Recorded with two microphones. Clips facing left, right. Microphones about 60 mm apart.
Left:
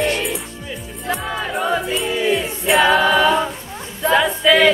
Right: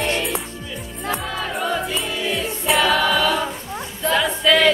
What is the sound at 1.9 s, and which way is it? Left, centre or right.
Music, centre.